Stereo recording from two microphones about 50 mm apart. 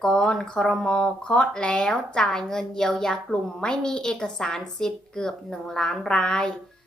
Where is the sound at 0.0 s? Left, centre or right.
Centre.